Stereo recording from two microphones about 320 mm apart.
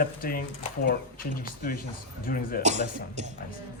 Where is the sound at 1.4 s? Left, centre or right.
Left.